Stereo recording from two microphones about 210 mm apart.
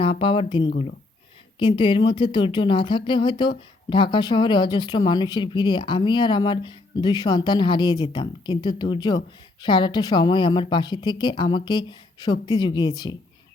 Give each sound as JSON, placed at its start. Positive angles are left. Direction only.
{"t": 0.0, "sound": "speech", "side_deg": 25}